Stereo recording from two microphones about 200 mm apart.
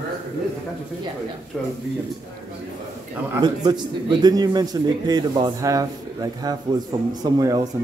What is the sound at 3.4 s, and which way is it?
A man's voice, 20° right (ahead or behind).